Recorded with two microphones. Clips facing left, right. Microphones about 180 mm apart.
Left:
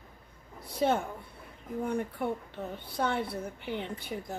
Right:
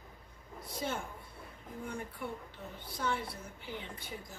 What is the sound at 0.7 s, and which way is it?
Speech, 65° left (ahead or behind).